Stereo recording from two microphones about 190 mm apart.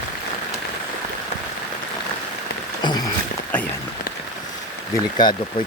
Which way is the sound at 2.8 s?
20° left (ahead or behind).